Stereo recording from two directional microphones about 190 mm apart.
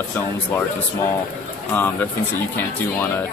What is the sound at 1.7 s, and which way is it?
Speech, 10° left (ahead or behind).